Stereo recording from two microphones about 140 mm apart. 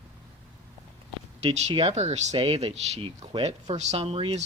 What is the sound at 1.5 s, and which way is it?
Speech, 45° right (ahead or behind).